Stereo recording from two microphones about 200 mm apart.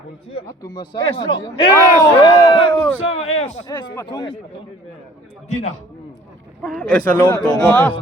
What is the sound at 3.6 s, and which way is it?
Speech, 20° left (ahead or behind).